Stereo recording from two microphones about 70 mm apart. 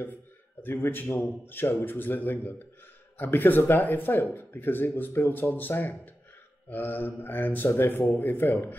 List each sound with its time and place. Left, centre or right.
0.0 s a man's voice: left